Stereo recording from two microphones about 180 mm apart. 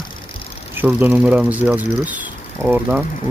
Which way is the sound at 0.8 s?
10° right (ahead or behind).